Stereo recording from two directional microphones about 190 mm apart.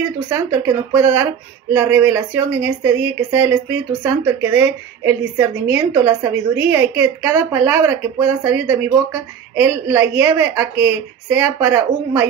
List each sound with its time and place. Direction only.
0.5 s speech: 10° right (ahead or behind)